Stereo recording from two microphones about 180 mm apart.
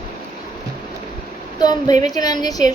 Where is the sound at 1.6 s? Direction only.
20° left (ahead or behind).